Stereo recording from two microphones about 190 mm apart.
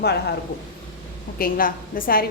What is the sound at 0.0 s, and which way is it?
Speech, 60° left (ahead or behind).